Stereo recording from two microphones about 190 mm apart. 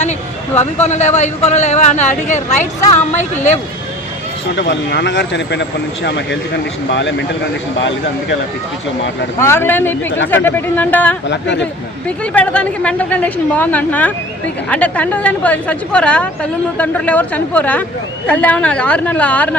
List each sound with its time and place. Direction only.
0.6 s speech: 35° left (ahead or behind)
4.7 s speech: 65° left (ahead or behind)
9.4 s a woman's voice: 10° left (ahead or behind)
11.3 s speech: 70° left (ahead or behind)
12.0 s a woman's voice: 5° left (ahead or behind)